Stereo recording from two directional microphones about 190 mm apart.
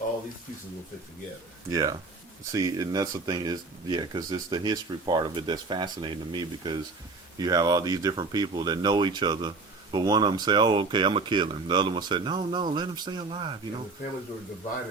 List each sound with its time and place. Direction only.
1.7 s speech: 20° right (ahead or behind)